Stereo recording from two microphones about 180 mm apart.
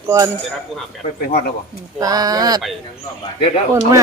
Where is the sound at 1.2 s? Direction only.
55° left (ahead or behind).